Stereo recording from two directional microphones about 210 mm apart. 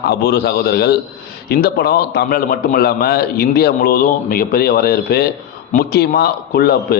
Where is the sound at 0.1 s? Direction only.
50° left (ahead or behind).